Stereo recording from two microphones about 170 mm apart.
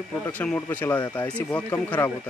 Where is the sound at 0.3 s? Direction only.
10° left (ahead or behind).